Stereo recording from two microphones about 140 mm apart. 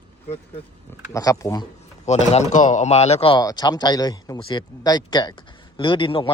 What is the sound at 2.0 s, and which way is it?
Speech, 55° left (ahead or behind).